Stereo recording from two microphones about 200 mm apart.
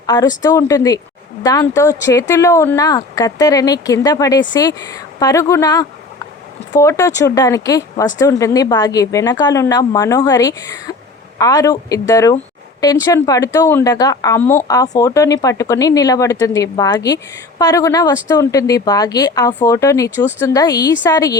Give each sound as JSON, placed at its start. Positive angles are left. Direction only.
{"t": 0.0, "sound": "a woman's voice", "side_deg": 20}